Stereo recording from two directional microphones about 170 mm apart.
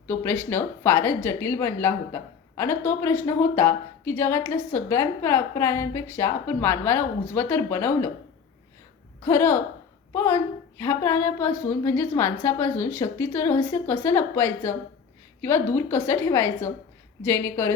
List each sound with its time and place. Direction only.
0.1 s speech: 15° left (ahead or behind)
9.2 s speech: 15° left (ahead or behind)